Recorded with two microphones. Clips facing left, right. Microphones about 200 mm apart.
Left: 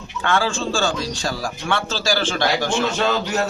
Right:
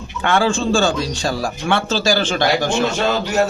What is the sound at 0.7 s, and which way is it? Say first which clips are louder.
A man's voice: right 5 dB; 20° right (ahead or behind).